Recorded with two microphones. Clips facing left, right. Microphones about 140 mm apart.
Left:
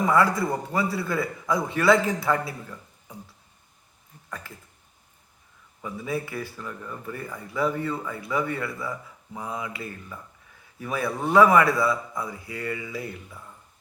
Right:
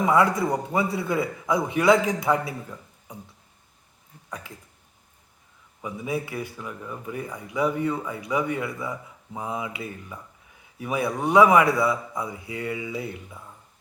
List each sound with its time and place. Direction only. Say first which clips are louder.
0.0 s a man's voice: right 1 dB; 20° right (ahead or behind)
4.3 s speech: right 1 dB; 15° right (ahead or behind)
5.8 s a man's voice: right 1 dB; 15° right (ahead or behind)